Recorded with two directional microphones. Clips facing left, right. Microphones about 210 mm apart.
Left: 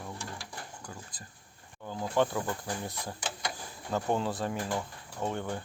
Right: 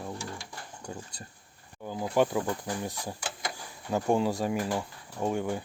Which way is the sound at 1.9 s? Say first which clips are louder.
Right 3 dB; 10° right (ahead or behind).